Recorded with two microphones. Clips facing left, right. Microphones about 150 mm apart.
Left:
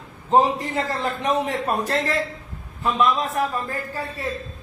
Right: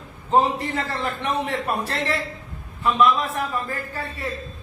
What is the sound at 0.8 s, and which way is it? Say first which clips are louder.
A man's voice: left 2 dB; 40° left (ahead or behind).